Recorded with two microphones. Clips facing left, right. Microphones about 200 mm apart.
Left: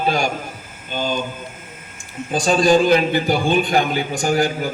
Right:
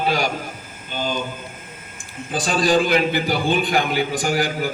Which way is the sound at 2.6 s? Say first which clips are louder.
Left 3 dB; 45° left (ahead or behind).